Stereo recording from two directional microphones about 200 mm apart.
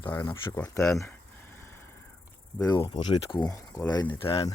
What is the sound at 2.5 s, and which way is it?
Speech, 15° left (ahead or behind).